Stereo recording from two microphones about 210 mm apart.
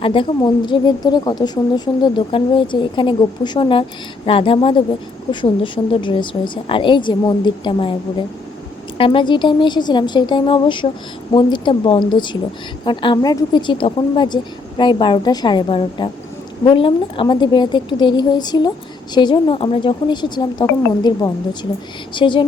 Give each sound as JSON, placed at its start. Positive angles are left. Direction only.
{"t": 0.0, "sound": "a woman's voice", "side_deg": 25}
{"t": 9.0, "sound": "a woman's voice", "side_deg": 25}